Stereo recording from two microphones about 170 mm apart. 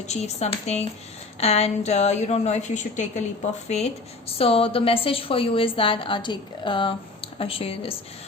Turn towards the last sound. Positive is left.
turn(degrees=35)  # may be behind; listen again after turning